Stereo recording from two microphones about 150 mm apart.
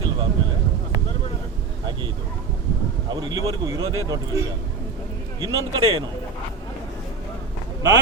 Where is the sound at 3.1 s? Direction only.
30° right (ahead or behind).